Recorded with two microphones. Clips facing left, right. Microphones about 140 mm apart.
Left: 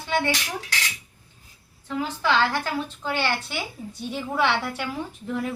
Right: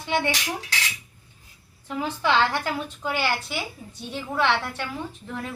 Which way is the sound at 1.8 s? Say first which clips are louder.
Even; 20° right (ahead or behind).